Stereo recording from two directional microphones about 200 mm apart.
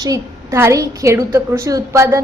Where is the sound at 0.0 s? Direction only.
15° right (ahead or behind).